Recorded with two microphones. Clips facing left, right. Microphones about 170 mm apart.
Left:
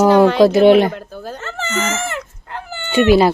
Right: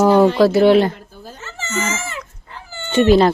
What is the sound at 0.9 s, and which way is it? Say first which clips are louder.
Dog: left 3 dB; 75° left (ahead or behind).